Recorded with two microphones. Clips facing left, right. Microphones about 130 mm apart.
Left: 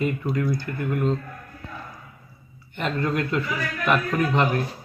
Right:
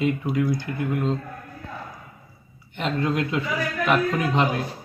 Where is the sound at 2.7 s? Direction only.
15° right (ahead or behind).